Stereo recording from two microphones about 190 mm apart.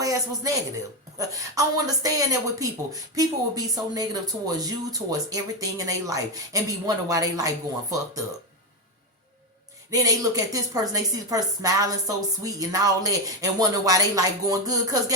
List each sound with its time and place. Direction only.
0.0 s a sound: 15° right (ahead or behind)
1.3 s speech: 20° right (ahead or behind)
9.9 s a woman's voice: 20° right (ahead or behind)